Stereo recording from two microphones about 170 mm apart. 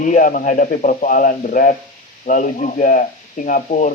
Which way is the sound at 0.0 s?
50° left (ahead or behind).